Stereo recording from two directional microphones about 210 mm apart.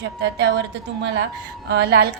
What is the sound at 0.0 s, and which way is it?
A woman's voice, 55° right (ahead or behind).